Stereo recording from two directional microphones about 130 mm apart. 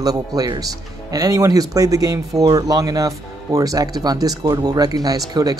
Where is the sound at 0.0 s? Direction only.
30° right (ahead or behind).